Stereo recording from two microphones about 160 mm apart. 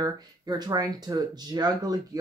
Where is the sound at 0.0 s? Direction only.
25° right (ahead or behind).